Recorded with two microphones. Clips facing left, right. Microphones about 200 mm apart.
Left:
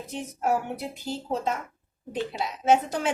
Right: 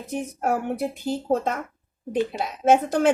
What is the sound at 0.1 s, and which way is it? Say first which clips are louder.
Speech: right 2 dB; 55° right (ahead or behind).